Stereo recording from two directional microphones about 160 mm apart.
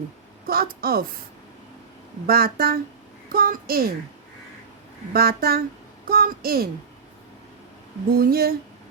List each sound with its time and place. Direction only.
0.4 s a woman's voice: 70° right (ahead or behind)
2.2 s a woman's voice: 70° right (ahead or behind)
5.1 s a woman's voice: 70° right (ahead or behind)
8.2 s a woman's voice: 70° right (ahead or behind)